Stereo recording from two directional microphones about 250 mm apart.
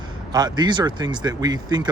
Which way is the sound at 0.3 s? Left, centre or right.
Centre.